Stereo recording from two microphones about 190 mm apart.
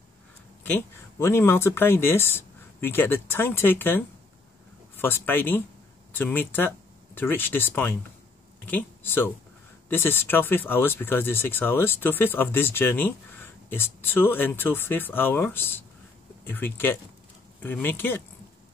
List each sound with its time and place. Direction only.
0.7 s speech: 10° left (ahead or behind)